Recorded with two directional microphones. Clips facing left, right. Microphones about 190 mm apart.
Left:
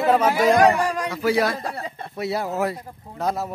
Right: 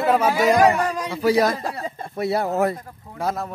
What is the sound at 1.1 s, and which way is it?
Speech, 40° right (ahead or behind).